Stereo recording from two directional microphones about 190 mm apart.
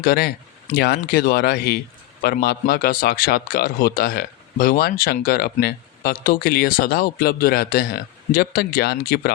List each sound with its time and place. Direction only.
0.0 s a man's voice: 55° left (ahead or behind)